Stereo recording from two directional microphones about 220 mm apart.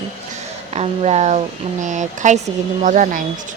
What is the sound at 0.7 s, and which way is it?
Speech, 30° right (ahead or behind).